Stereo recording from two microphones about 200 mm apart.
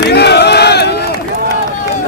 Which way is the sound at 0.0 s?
55° left (ahead or behind).